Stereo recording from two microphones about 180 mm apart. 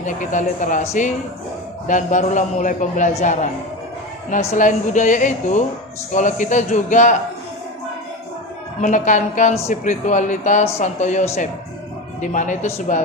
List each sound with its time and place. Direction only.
0.0 s a man's voice: 45° left (ahead or behind)
1.9 s a man's voice: 45° left (ahead or behind)
4.5 s a man's voice: 45° left (ahead or behind)
8.8 s a man's voice: 45° left (ahead or behind)